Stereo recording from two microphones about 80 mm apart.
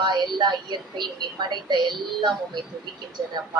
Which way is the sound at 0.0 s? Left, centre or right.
Right.